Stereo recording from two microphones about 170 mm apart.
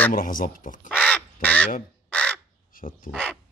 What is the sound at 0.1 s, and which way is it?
Speech, 55° left (ahead or behind).